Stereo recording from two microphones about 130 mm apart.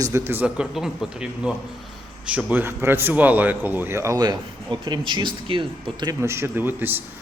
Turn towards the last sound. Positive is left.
turn(degrees=-15)  # may be behind; listen again after turning